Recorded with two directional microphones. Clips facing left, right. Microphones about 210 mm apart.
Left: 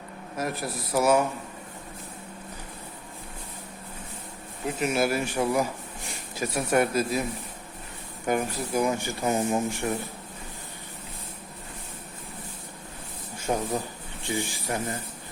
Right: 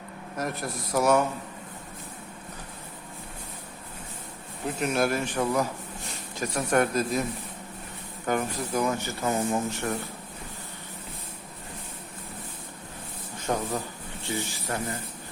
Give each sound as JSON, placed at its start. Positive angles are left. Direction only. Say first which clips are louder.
{"t": 0.3, "sound": "a man's voice", "louder": "left 1 dB", "side_deg": 5}
{"t": 4.8, "sound": "speech", "louder": "left 1 dB", "side_deg": 5}
{"t": 8.3, "sound": "speech", "louder": "left 1 dB", "side_deg": 10}
{"t": 13.5, "sound": "speech", "louder": "left 1 dB", "side_deg": 10}